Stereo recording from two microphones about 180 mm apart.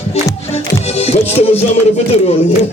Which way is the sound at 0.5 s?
35° left (ahead or behind).